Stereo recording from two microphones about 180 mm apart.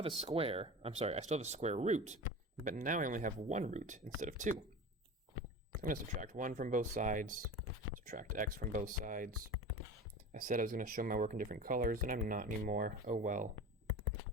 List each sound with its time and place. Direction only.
0.2 s speech: 30° right (ahead or behind)
5.8 s speech: 45° right (ahead or behind)
10.3 s speech: 50° right (ahead or behind)